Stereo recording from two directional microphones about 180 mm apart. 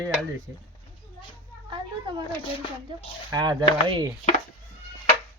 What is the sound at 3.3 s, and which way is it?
Speech, 25° right (ahead or behind).